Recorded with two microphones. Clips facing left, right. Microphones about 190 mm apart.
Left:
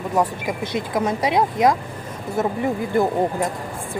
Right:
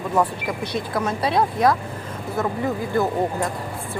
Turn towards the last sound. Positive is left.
turn(degrees=25)  # may be behind; listen again after turning